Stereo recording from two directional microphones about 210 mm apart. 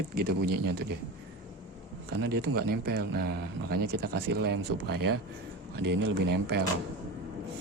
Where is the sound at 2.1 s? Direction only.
50° right (ahead or behind).